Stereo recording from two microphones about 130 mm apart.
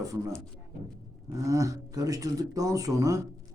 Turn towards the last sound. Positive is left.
turn(degrees=-25)  # may be behind; listen again after turning